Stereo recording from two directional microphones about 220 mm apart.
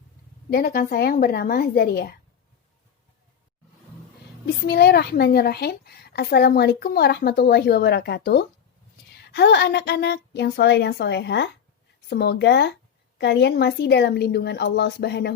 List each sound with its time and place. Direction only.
0.5 s a woman's voice: 40° left (ahead or behind)
4.6 s a woman's voice: 50° left (ahead or behind)